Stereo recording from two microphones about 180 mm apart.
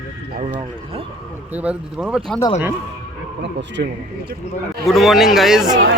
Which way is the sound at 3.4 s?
80° right.